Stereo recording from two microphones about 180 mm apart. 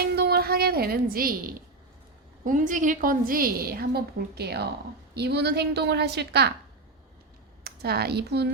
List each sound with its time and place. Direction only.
0.0 s music: 60° right (ahead or behind)
2.4 s a woman's voice: 45° right (ahead or behind); by 6.5 s 65° right (ahead or behind)
7.6 s speech: 60° right (ahead or behind)